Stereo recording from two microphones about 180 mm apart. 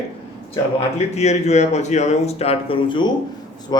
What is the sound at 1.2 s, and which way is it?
Speech, 40° left (ahead or behind).